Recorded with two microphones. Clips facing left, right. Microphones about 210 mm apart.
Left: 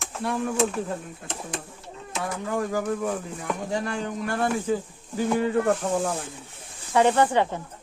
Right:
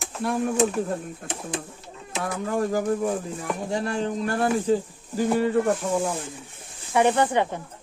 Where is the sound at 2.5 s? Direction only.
40° right (ahead or behind).